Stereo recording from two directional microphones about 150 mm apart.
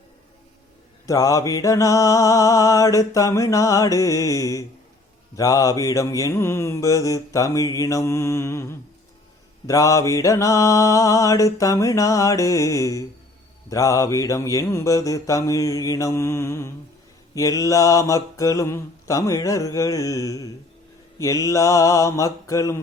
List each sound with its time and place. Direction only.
1.0 s mantra: 25° left (ahead or behind)